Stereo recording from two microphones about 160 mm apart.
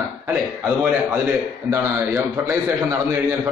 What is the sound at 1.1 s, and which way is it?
A man's voice, 10° right (ahead or behind).